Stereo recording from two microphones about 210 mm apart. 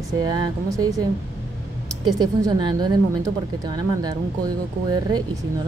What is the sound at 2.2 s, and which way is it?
A woman's voice, 20° right (ahead or behind).